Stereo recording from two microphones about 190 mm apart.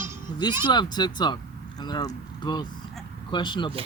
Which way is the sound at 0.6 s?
20° left (ahead or behind).